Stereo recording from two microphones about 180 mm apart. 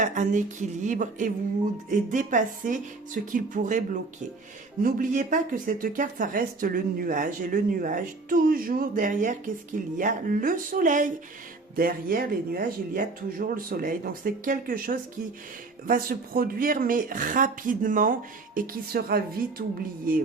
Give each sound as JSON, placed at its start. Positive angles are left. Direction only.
{"t": 0.0, "sound": "speech", "side_deg": -45}